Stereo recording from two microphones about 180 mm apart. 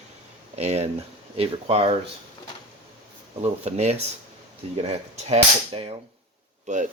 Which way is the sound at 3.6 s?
35° right (ahead or behind).